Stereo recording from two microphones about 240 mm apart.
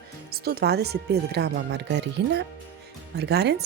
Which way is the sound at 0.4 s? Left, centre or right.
Right.